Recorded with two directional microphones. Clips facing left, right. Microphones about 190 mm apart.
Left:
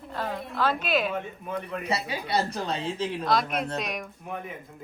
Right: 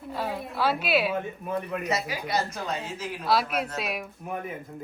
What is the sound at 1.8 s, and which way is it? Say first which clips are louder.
A woman's voice: even; 30° left (ahead or behind).